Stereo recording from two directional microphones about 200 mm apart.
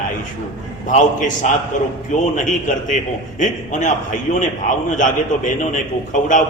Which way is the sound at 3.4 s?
40° left (ahead or behind).